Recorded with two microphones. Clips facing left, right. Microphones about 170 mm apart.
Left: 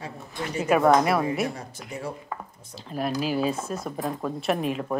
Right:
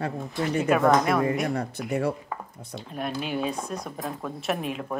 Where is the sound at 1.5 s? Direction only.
65° right (ahead or behind).